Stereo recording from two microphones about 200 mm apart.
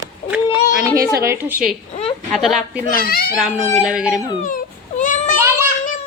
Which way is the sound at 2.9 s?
50° left (ahead or behind).